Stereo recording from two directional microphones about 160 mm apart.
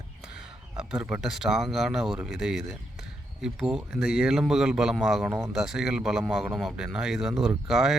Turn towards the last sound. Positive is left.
turn(degrees=0)  # may be behind; listen again after turning